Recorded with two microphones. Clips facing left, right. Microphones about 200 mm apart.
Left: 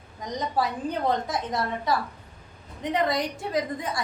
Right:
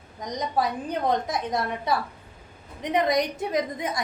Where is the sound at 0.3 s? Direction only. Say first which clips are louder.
Right 1 dB; 20° right (ahead or behind).